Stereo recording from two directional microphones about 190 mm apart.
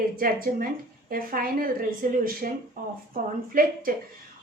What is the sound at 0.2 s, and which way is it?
A woman's voice, 50° right (ahead or behind).